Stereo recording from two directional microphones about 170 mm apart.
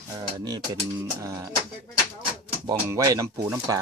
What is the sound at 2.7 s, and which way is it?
Speech, 20° right (ahead or behind).